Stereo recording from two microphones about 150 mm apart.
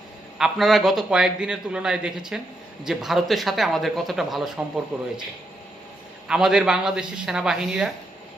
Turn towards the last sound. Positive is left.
turn(degrees=0)  # may be behind; listen again after turning